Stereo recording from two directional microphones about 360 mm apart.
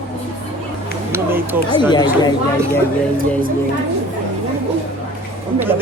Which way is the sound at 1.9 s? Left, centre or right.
Centre.